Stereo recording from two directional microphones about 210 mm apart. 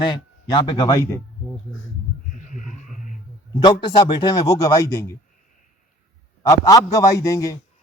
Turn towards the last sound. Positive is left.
turn(degrees=15)  # may be behind; listen again after turning